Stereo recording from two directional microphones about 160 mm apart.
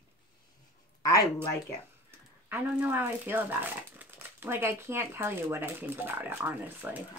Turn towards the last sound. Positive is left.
turn(degrees=-10)  # may be behind; listen again after turning